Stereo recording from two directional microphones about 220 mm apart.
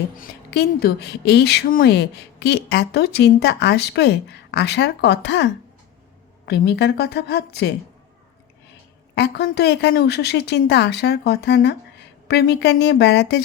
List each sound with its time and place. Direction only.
0.2 s speech: 45° left (ahead or behind)
9.1 s speech: 50° left (ahead or behind)